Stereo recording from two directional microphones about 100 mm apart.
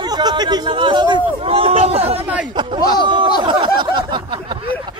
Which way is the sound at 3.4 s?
50° right (ahead or behind).